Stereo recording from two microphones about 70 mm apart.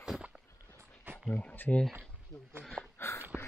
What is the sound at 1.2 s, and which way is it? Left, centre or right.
Speech, centre.